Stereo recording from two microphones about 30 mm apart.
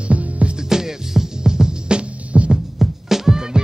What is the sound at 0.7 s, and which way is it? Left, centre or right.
Music, centre.